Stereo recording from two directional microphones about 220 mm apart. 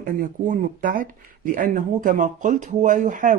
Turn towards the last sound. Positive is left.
turn(degrees=-35)  # may be behind; listen again after turning